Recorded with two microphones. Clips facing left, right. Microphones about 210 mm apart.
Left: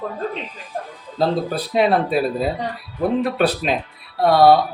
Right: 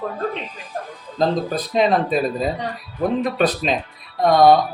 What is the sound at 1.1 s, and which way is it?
Speech, 10° left (ahead or behind).